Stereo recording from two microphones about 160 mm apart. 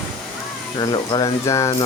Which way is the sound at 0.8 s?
30° left (ahead or behind).